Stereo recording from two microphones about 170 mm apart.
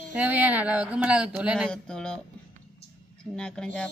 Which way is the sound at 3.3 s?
5° left (ahead or behind).